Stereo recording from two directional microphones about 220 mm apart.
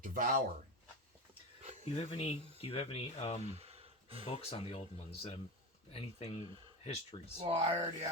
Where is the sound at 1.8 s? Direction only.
25° left (ahead or behind).